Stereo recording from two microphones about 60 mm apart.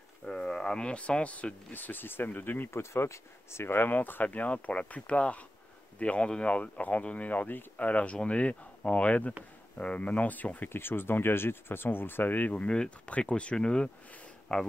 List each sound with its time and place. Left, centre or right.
0.3 s speech: centre; by 2.8 s left
2.8 s speech: left
10.7 s speech: left; by 14.7 s centre